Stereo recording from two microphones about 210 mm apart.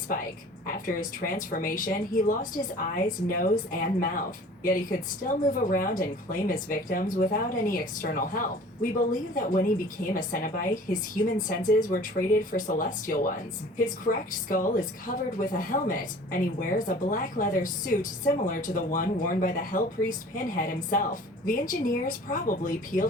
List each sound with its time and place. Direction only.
0.7 s speech: 40° left (ahead or behind)